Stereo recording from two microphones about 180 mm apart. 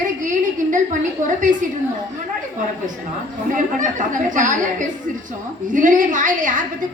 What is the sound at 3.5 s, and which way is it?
A woman's voice, 45° right (ahead or behind).